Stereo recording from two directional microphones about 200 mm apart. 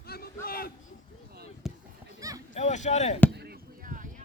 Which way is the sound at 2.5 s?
35° left (ahead or behind).